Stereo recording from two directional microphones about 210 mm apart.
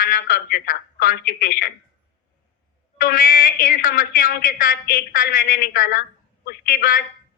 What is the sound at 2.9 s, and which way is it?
A woman's voice, 40° left (ahead or behind).